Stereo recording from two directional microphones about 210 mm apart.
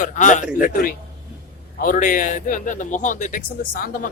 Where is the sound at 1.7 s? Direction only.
40° left (ahead or behind).